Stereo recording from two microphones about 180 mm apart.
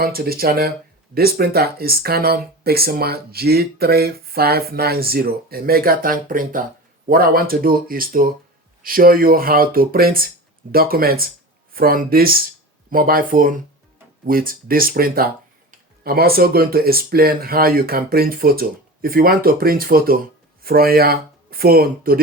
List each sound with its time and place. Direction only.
0.0 s speech: 55° right (ahead or behind)